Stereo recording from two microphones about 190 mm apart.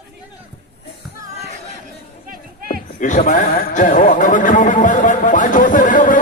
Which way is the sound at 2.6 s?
45° left (ahead or behind).